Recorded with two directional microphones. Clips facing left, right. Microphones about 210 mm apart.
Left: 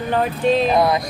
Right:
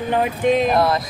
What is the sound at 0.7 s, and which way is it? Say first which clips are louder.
Speech: left 1 dB; centre (ahead or behind).